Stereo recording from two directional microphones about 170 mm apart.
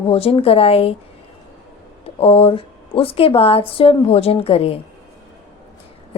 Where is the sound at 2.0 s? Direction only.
35° left (ahead or behind).